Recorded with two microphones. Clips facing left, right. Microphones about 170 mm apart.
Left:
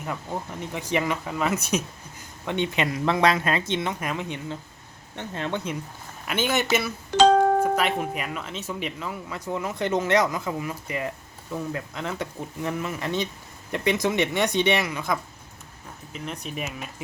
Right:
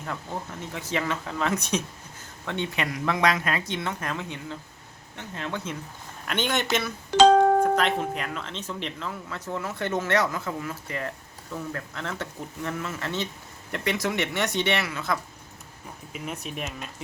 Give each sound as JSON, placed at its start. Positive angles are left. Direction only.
{"t": 0.0, "sound": "speech", "side_deg": 15}
{"t": 2.5, "sound": "speech", "side_deg": 20}
{"t": 6.2, "sound": "speech", "side_deg": 5}
{"t": 16.1, "sound": "speech", "side_deg": -5}